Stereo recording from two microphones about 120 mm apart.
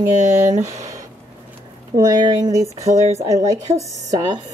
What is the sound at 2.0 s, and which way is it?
Speech, 30° right (ahead or behind).